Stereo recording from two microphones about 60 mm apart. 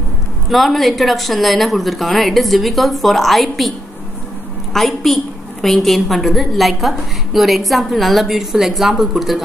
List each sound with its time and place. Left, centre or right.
0.5 s a woman's voice: centre
4.7 s a woman's voice: centre